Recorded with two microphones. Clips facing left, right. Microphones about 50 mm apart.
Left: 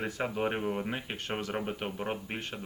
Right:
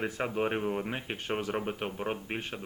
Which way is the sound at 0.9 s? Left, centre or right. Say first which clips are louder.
Right 1 dB; centre.